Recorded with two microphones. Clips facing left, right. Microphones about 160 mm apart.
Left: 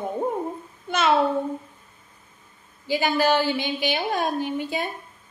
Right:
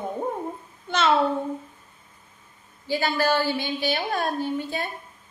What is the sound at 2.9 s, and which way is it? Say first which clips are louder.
A woman's voice: left 2 dB; 15° left (ahead or behind).